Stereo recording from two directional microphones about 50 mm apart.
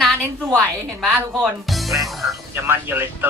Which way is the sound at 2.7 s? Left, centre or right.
Right.